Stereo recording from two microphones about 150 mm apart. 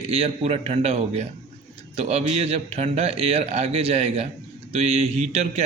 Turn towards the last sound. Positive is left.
turn(degrees=-45)  # may be behind; listen again after turning